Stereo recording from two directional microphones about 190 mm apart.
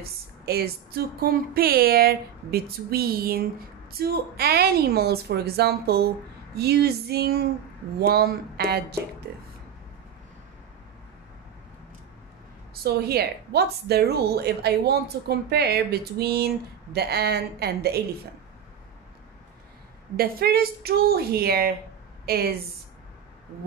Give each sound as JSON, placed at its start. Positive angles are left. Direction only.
{"t": 0.0, "sound": "a woman's voice", "side_deg": -55}
{"t": 12.8, "sound": "a woman's voice", "side_deg": -55}
{"t": 20.2, "sound": "a woman's voice", "side_deg": -50}